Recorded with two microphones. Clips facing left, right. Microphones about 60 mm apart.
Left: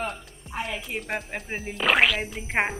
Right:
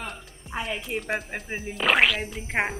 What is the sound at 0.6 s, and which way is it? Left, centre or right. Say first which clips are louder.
Speech: right 1 dB; centre.